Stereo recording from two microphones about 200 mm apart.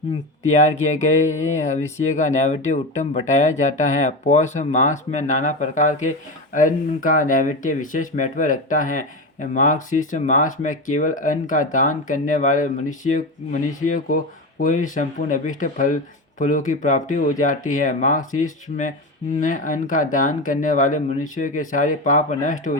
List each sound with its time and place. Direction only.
0.4 s speech: 35° left (ahead or behind)